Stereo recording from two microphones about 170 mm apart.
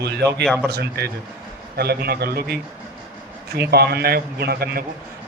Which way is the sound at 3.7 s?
70° right (ahead or behind).